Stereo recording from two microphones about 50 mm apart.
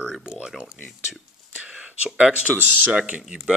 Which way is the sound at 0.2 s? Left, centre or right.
Centre.